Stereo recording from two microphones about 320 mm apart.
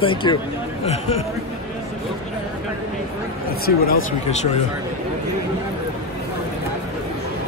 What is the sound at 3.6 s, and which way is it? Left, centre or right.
Speech, left.